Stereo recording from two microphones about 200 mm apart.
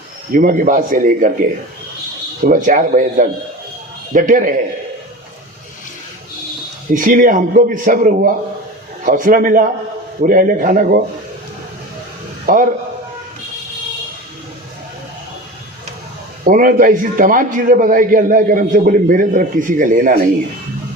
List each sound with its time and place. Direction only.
0.3 s a man's voice: 45° right (ahead or behind)
6.9 s a man's voice: 40° right (ahead or behind)
12.5 s a man's voice: 45° right (ahead or behind)
16.4 s a man's voice: 45° right (ahead or behind)